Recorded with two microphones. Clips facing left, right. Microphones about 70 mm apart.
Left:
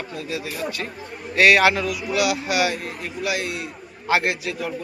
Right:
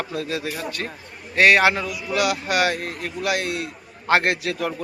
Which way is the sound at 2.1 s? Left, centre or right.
Right.